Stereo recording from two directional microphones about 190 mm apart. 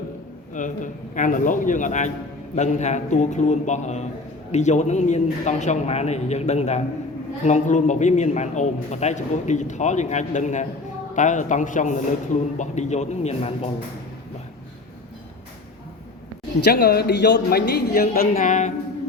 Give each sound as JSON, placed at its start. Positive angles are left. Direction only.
{"t": 0.5, "sound": "a man's voice", "side_deg": 40}
{"t": 16.6, "sound": "a woman's voice", "side_deg": 60}